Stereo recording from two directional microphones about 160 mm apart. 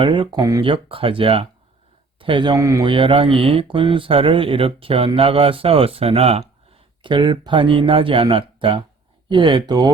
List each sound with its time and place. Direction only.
0.0 s speech: 30° right (ahead or behind)